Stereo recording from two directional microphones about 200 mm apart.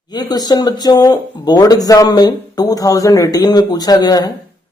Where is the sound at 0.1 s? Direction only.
20° left (ahead or behind).